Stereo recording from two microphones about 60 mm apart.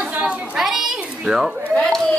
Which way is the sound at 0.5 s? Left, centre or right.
Centre.